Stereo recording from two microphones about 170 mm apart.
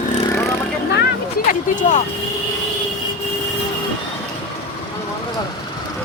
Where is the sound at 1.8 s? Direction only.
45° left (ahead or behind).